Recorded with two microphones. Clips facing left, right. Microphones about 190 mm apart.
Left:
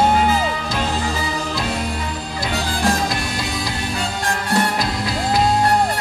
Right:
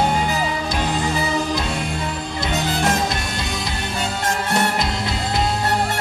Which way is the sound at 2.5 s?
20° right (ahead or behind).